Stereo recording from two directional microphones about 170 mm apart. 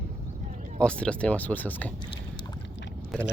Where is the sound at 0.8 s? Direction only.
5° left (ahead or behind).